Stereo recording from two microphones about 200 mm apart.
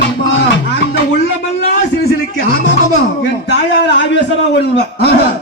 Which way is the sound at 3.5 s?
60° left (ahead or behind).